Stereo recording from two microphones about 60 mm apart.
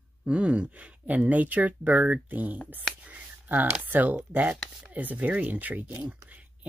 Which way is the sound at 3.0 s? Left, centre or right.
Right.